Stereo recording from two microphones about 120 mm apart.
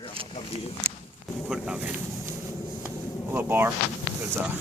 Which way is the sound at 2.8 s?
15° right (ahead or behind).